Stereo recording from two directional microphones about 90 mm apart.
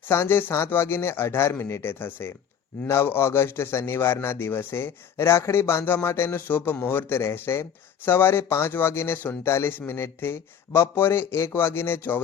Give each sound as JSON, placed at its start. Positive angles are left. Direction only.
{"t": 0.1, "sound": "a man's voice", "side_deg": 30}